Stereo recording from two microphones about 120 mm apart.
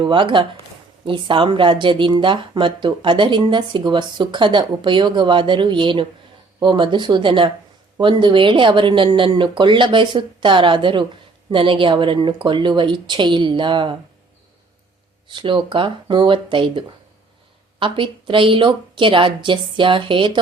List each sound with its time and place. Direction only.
0.0 s a woman's voice: 45° right (ahead or behind)
15.3 s a woman's voice: 45° right (ahead or behind)